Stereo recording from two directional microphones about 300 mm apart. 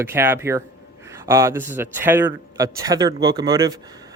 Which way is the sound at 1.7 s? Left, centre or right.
Centre.